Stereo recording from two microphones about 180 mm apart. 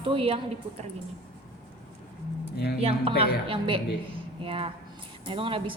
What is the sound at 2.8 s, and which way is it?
A woman's voice, 35° right (ahead or behind).